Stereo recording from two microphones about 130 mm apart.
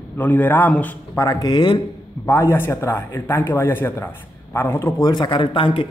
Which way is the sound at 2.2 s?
20° left (ahead or behind).